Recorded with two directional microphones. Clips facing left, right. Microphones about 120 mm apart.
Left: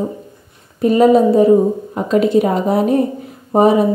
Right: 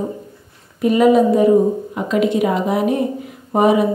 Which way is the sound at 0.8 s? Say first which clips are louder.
Left 2 dB; 35° left (ahead or behind).